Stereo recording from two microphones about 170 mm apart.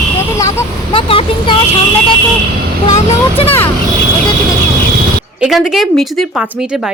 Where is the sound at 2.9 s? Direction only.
35° left (ahead or behind).